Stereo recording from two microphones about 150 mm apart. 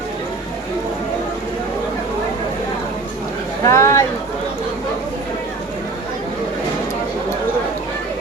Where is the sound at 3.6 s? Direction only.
20° left (ahead or behind).